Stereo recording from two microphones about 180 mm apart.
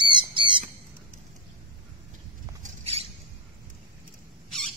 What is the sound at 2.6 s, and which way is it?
Rodents, 35° right (ahead or behind).